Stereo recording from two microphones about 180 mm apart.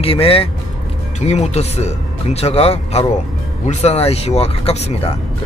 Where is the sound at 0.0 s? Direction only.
30° left (ahead or behind).